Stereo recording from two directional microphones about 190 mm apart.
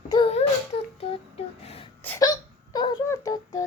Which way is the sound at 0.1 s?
30° left (ahead or behind).